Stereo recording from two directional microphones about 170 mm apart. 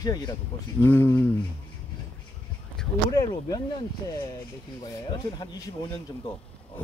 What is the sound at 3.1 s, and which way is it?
Speech, 20° left (ahead or behind).